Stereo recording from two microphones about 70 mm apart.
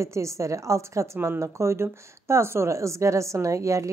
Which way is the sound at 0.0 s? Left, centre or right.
Right.